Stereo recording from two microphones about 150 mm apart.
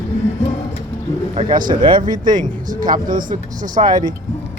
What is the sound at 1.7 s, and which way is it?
Speech, 35° right (ahead or behind).